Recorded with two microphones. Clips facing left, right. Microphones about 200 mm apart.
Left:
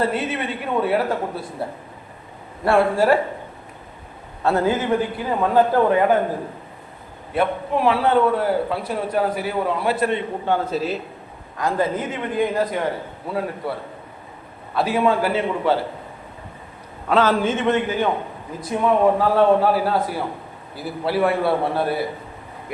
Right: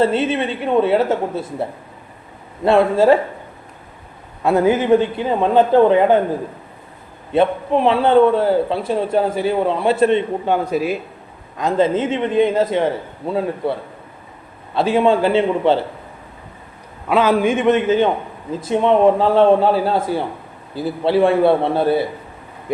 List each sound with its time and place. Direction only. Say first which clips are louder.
0.0 s a man's voice: right 6 dB; 25° right (ahead or behind)
2.6 s a man's voice: right 4 dB; 20° right (ahead or behind)
4.4 s a man's voice: right 5 dB; 20° right (ahead or behind)
7.3 s a man's voice: right 5 dB; 25° right (ahead or behind)
11.5 s a man's voice: right 5 dB; 20° right (ahead or behind)
14.8 s a man's voice: right 4 dB; 25° right (ahead or behind)
17.1 s a man's voice: right 3 dB; 10° right (ahead or behind)